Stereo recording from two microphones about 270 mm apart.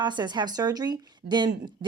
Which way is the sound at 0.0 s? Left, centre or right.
Centre.